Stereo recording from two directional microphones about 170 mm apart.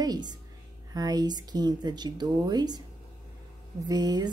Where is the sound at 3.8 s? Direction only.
25° right (ahead or behind).